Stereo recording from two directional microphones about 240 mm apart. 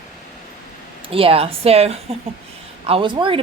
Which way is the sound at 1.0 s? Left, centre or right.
Right.